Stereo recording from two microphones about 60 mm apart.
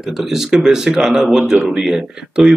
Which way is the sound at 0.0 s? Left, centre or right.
Centre.